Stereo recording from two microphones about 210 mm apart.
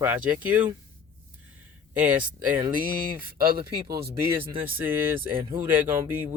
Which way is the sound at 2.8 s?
45° right (ahead or behind).